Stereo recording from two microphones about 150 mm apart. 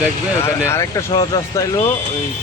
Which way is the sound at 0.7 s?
20° left (ahead or behind).